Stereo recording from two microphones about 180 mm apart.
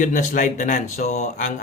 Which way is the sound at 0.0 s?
45° left (ahead or behind).